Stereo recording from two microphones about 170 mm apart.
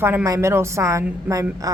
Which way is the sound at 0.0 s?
15° right (ahead or behind).